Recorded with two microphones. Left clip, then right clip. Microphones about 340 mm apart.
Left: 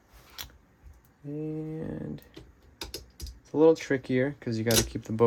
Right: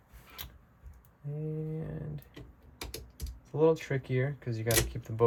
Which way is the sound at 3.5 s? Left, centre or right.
Left.